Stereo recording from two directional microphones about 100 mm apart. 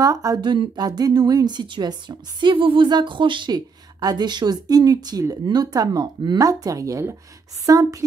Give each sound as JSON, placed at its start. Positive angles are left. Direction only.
{"t": 0.0, "sound": "a woman's voice", "side_deg": -35}
{"t": 0.4, "sound": "a woman's voice", "side_deg": -50}